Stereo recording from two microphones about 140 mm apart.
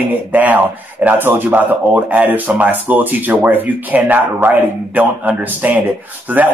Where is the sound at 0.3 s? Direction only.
10° right (ahead or behind).